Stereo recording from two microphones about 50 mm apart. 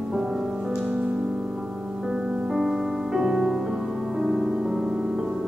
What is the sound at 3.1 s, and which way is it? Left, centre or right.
Music, centre.